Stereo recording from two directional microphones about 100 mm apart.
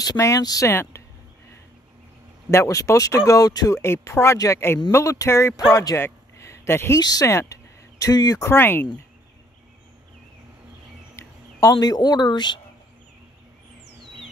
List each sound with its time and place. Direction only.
0.0 s speech: 35° left (ahead or behind)
2.5 s speech: 30° left (ahead or behind)
3.8 s speech: 25° left (ahead or behind)
5.7 s a sound: 30° left (ahead or behind)
7.0 s speech: 40° left (ahead or behind)
7.2 s speech: 30° left (ahead or behind)
8.0 s speech: 40° left (ahead or behind)
8.5 s speech: 20° left (ahead or behind)
11.1 s speech: 35° left (ahead or behind)